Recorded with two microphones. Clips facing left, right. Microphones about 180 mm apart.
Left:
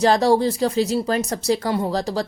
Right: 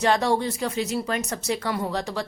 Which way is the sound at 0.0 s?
35° left (ahead or behind).